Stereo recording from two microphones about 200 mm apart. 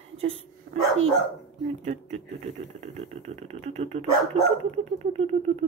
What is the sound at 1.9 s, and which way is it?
Speech, 35° right (ahead or behind).